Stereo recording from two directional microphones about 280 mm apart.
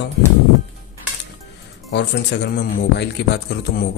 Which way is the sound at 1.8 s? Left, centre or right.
Left.